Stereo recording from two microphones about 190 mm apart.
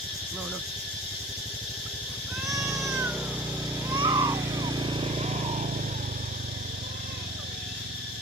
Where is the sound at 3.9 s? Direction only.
20° right (ahead or behind); by 5.6 s 35° right (ahead or behind).